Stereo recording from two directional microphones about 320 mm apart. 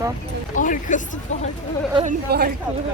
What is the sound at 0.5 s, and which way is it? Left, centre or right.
Speech, left.